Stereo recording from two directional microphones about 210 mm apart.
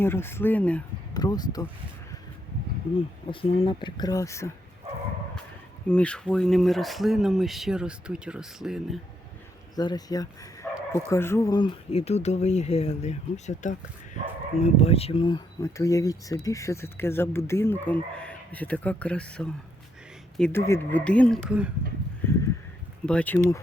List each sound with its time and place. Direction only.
0.0 s speech: 10° left (ahead or behind)
1.1 s speech: 20° left (ahead or behind)
3.2 s speech: 25° left (ahead or behind)
5.9 s speech: 5° left (ahead or behind)
9.7 s speech: 20° left (ahead or behind); by 21.7 s centre (ahead or behind)
23.0 s speech: 5° left (ahead or behind)